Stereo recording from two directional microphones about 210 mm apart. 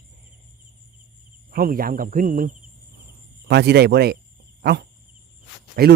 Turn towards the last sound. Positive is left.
turn(degrees=-45)  # may be behind; listen again after turning